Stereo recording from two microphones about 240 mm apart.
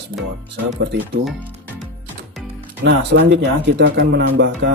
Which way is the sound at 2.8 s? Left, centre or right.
Right.